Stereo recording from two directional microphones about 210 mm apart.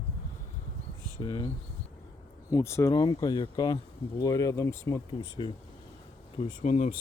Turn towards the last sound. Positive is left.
turn(degrees=35)  # may be behind; listen again after turning